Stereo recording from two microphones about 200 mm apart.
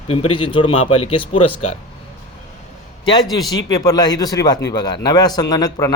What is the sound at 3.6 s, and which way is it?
Speech, 20° left (ahead or behind).